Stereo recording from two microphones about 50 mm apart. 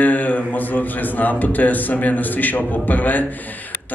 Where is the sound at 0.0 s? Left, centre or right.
Left.